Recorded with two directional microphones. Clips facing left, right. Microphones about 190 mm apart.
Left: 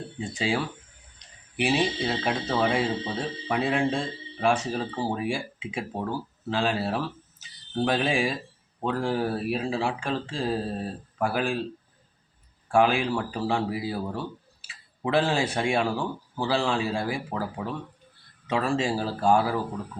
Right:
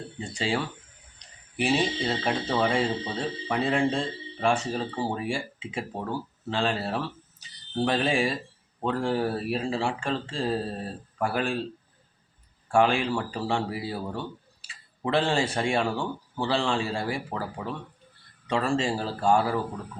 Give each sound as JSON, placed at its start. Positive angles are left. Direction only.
{"t": 0.2, "sound": "speech", "side_deg": 0}
{"t": 12.6, "sound": "speech", "side_deg": 5}